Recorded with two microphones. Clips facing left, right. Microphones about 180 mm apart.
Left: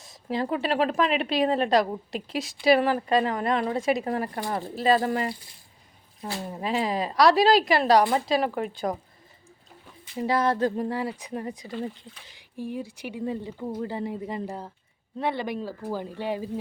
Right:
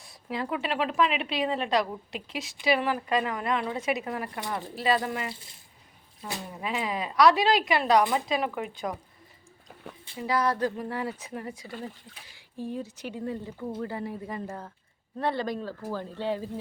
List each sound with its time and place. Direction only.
0.3 s a woman's voice: 35° left (ahead or behind)
6.5 s a woman's voice: 35° left (ahead or behind)
10.2 s speech: 25° left (ahead or behind)
10.9 s speech: 15° left (ahead or behind)